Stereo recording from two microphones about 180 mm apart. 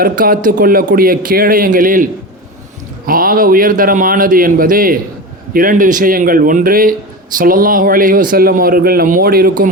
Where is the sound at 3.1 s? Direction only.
50° right (ahead or behind).